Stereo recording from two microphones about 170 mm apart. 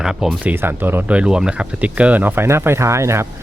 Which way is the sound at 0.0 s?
5° right (ahead or behind).